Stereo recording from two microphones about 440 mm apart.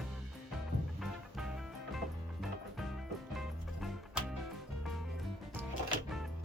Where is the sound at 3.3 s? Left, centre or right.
Centre.